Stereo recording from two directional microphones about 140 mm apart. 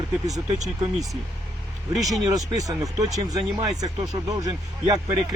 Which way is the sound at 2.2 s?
25° right (ahead or behind).